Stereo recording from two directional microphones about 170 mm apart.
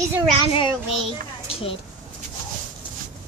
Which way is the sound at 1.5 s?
35° left (ahead or behind).